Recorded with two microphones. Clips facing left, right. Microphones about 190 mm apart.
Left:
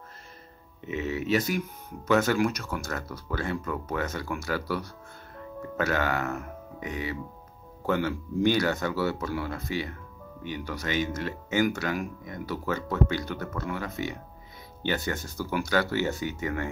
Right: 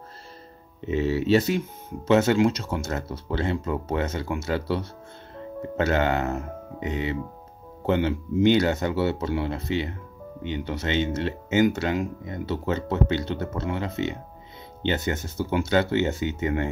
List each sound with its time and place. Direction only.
0.7 s speech: 30° right (ahead or behind)